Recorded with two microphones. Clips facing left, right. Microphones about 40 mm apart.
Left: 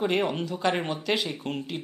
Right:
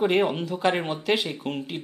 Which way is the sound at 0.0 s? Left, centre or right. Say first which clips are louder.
Right 3 dB; centre.